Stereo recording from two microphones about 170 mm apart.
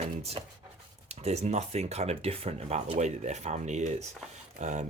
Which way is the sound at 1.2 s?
40° right (ahead or behind).